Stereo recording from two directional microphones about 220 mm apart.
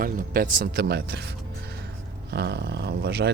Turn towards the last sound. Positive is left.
turn(degrees=-45)  # may be behind; listen again after turning